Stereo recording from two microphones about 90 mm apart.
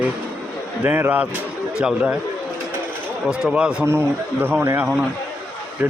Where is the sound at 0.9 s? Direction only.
20° right (ahead or behind).